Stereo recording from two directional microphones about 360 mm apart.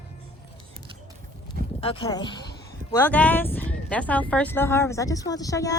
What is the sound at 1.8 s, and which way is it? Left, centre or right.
Speech, centre.